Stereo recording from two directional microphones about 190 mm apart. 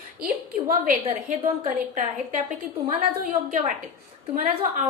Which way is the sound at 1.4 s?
40° right (ahead or behind).